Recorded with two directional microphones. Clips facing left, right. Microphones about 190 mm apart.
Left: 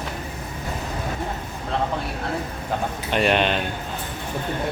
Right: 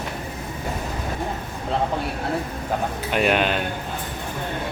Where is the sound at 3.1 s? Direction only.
5° right (ahead or behind).